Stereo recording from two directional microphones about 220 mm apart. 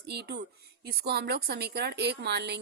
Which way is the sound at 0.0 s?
50° right (ahead or behind).